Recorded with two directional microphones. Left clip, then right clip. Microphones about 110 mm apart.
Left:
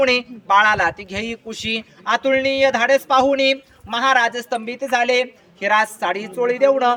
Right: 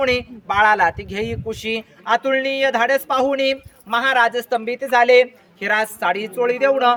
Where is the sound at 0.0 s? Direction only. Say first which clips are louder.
Left 2 dB; 30° right (ahead or behind).